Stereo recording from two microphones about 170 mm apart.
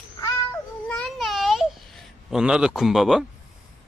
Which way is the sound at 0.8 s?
5° left (ahead or behind).